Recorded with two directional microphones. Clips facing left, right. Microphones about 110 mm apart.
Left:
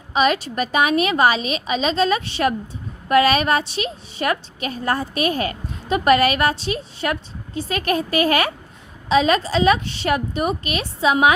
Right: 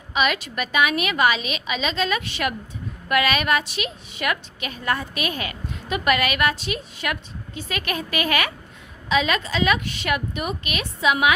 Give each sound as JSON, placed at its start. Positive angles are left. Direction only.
{"t": 0.1, "sound": "a woman's voice", "side_deg": 35}